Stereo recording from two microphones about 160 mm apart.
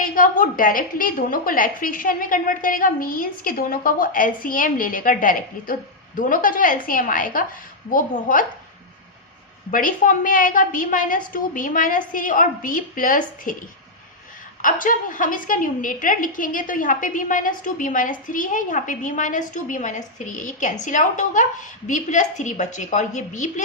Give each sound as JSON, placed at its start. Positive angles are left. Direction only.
{"t": 0.0, "sound": "a woman's voice", "side_deg": 60}
{"t": 9.7, "sound": "a woman's voice", "side_deg": 60}